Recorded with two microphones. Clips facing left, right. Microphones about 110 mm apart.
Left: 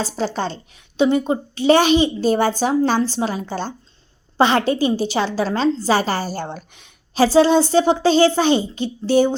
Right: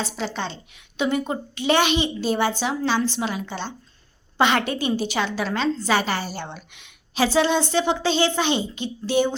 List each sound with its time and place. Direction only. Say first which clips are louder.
0.0 s a woman's voice: left 5 dB; 40° left (ahead or behind)
1.0 s a woman's voice: left 6 dB; 25° left (ahead or behind)